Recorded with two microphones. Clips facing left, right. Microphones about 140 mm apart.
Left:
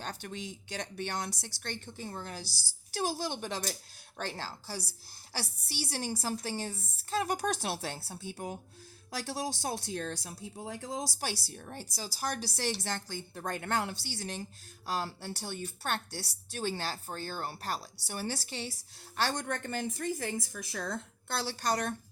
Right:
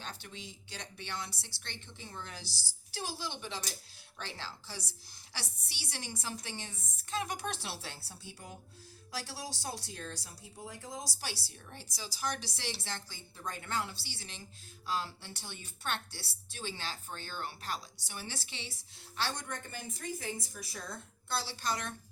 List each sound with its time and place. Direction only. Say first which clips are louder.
0.3 s a woman's voice: left 7 dB; 55° left (ahead or behind); by 11.0 s 80° left
11.2 s a woman's voice: left 6 dB; 50° left (ahead or behind)
12.8 s a woman's voice: left 7 dB; 55° left (ahead or behind)
14.0 s a woman's voice: left 10 dB; 50° left (ahead or behind)